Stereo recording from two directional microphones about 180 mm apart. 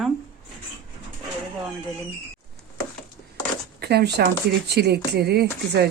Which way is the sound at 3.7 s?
65° right (ahead or behind).